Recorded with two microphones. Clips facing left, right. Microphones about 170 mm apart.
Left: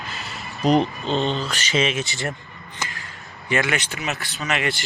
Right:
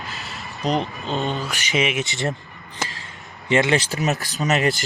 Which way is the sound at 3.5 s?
25° right (ahead or behind).